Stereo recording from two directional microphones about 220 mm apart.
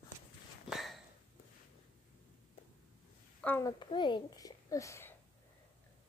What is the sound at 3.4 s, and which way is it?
A child's voice, 10° left (ahead or behind).